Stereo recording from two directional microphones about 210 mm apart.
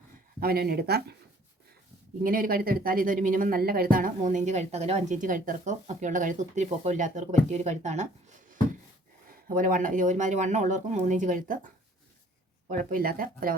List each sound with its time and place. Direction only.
0.3 s speech: 45° right (ahead or behind)
2.2 s speech: 40° right (ahead or behind)
9.5 s speech: 40° right (ahead or behind)
12.7 s speech: 45° right (ahead or behind)